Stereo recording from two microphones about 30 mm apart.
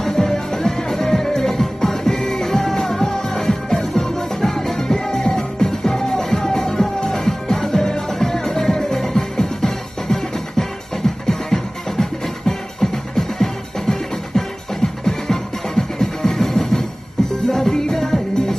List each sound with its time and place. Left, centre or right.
0.0 s music: centre
17.2 s music: left
17.9 s music: centre